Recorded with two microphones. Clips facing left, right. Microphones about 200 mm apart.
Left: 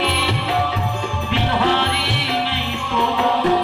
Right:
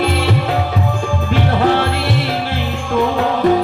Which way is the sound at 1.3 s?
45° right (ahead or behind).